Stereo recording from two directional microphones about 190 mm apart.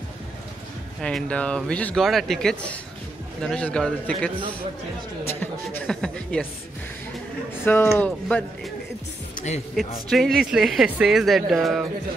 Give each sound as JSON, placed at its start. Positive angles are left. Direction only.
{"t": 1.0, "sound": "speech", "side_deg": 5}
{"t": 5.2, "sound": "speech", "side_deg": 10}
{"t": 7.6, "sound": "speech", "side_deg": 10}
{"t": 10.0, "sound": "speech", "side_deg": 0}